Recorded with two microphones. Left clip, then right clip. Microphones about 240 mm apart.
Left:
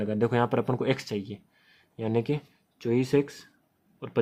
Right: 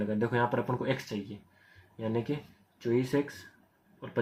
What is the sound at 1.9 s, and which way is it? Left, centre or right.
Speech, left.